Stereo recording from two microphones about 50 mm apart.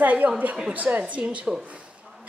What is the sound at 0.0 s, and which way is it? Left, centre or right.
A woman's voice, right.